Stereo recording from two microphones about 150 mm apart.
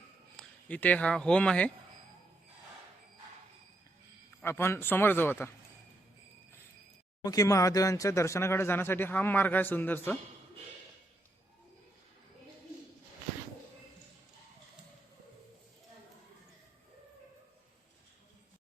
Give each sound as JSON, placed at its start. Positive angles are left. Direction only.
{"t": 0.3, "sound": "speech", "side_deg": 10}
{"t": 4.4, "sound": "speech", "side_deg": 15}
{"t": 7.2, "sound": "speech", "side_deg": 25}